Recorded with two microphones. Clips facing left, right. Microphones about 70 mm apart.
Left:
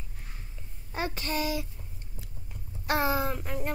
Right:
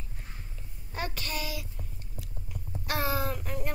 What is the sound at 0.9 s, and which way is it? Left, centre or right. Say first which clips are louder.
Speech: left 4 dB; left.